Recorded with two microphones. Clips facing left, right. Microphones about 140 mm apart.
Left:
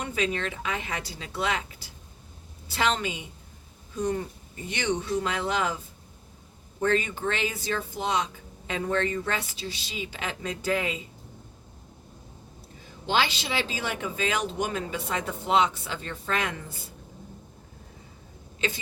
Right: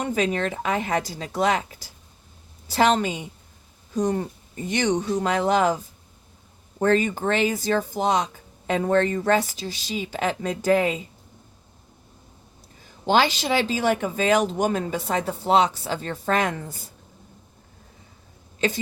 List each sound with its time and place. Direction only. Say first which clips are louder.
0.0 s a woman's voice: right 5 dB; 40° right (ahead or behind)
13.1 s speech: right 7 dB; 45° right (ahead or behind)